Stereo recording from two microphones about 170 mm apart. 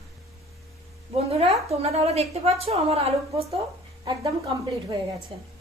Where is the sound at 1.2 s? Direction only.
35° right (ahead or behind).